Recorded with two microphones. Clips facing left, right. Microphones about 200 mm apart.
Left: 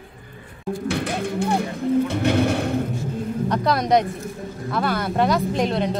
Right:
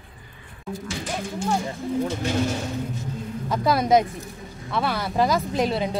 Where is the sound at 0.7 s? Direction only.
60° left (ahead or behind).